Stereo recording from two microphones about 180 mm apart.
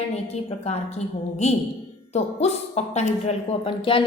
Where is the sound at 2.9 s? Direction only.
35° left (ahead or behind).